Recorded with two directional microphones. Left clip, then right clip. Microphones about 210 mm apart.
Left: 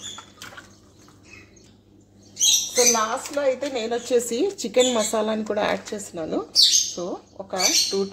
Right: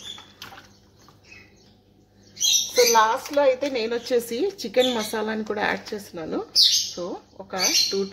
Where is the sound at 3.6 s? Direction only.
15° right (ahead or behind).